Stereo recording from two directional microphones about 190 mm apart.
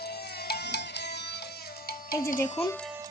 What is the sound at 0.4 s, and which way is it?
Music, 60° left (ahead or behind).